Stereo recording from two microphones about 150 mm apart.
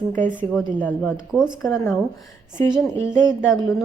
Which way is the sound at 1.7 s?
20° left (ahead or behind).